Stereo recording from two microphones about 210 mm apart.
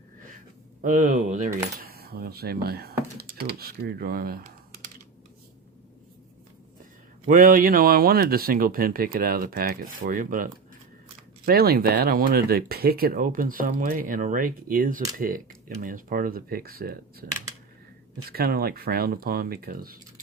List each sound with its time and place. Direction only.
0.8 s speech: 40° right (ahead or behind)
7.3 s speech: 40° right (ahead or behind)
18.3 s speech: 45° right (ahead or behind)